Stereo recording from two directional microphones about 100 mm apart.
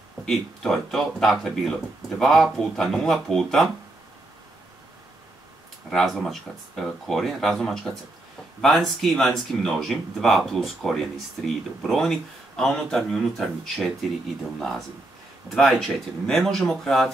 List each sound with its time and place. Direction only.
0.2 s speech: 5° left (ahead or behind)
5.9 s speech: centre (ahead or behind)
15.5 s speech: centre (ahead or behind)